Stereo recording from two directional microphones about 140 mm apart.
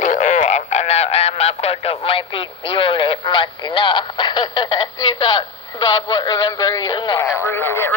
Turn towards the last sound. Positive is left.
turn(degrees=15)  # may be behind; listen again after turning